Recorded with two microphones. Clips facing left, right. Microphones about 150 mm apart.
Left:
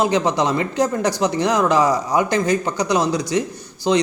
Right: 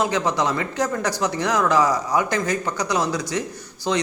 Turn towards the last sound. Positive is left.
turn(degrees=20)  # may be behind; listen again after turning